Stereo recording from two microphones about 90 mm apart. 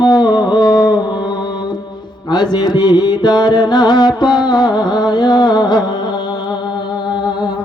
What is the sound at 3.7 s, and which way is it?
Music, 50° left (ahead or behind).